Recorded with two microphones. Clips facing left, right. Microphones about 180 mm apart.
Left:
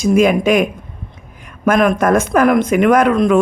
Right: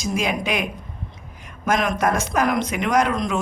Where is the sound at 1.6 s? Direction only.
55° left (ahead or behind).